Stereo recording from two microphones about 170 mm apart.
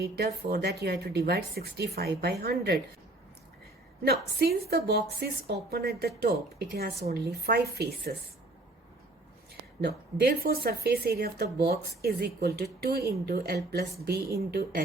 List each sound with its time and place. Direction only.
0.0 s a woman's voice: 70° right (ahead or behind)
4.0 s a woman's voice: 65° right (ahead or behind)
9.8 s a woman's voice: 65° right (ahead or behind)